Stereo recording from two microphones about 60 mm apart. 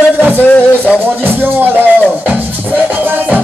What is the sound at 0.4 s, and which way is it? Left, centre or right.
Music, left.